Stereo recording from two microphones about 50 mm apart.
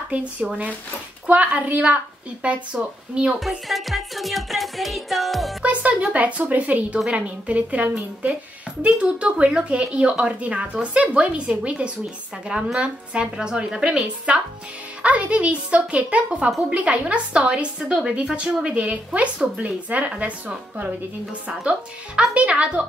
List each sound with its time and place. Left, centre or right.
0.1 s speech: right
3.3 s music: centre
5.6 s speech: right
21.5 s speech: centre